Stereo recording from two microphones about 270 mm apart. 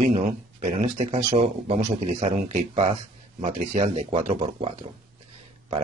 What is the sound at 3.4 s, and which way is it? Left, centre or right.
Speech, right.